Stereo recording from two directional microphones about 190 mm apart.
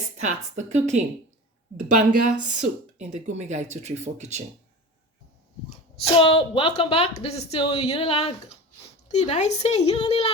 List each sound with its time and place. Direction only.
0.2 s speech: 35° right (ahead or behind)
6.0 s a woman's voice: 25° left (ahead or behind)